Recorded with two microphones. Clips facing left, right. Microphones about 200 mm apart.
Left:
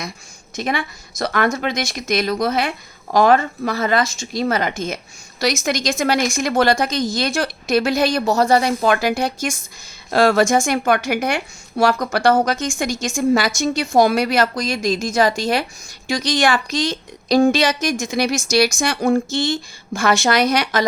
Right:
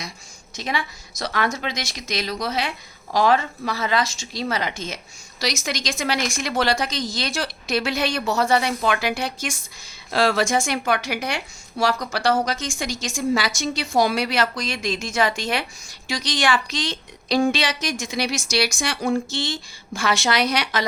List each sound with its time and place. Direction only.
0.5 s a woman's voice: 55° left (ahead or behind)